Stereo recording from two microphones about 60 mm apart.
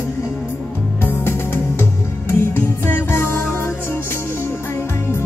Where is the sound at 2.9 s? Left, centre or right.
Left.